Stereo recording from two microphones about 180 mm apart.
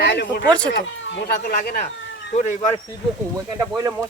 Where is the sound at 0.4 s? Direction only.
5° left (ahead or behind).